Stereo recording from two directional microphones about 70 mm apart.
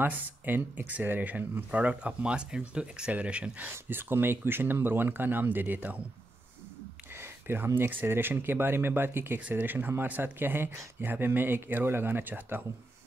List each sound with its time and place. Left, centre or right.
0.0 s speech: right
7.2 s speech: right